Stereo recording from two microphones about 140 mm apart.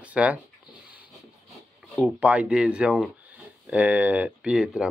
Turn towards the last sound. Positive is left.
turn(degrees=-5)  # may be behind; listen again after turning